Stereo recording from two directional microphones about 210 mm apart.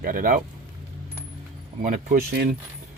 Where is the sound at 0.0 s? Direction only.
40° right (ahead or behind).